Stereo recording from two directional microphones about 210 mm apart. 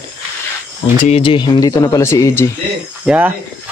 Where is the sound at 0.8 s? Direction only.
30° left (ahead or behind); by 2.4 s 15° left (ahead or behind).